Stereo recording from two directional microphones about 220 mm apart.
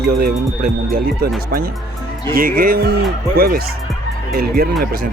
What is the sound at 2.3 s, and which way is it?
Speech, 40° right (ahead or behind).